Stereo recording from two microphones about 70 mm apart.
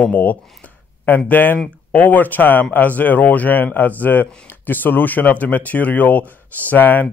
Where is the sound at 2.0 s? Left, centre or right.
Left.